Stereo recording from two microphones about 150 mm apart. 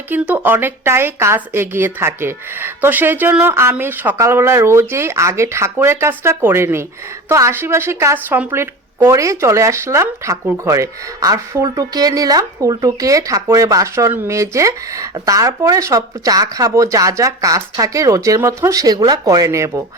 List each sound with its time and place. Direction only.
0.1 s a woman's voice: 15° right (ahead or behind)